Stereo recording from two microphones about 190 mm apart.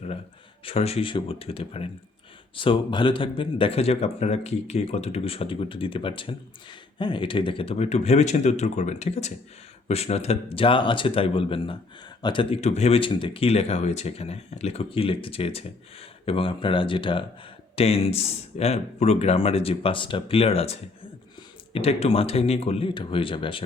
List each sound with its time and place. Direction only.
0.6 s speech: 30° left (ahead or behind)